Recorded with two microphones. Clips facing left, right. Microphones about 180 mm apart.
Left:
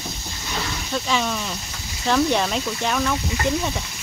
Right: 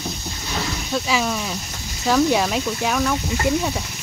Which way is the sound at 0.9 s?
5° right (ahead or behind).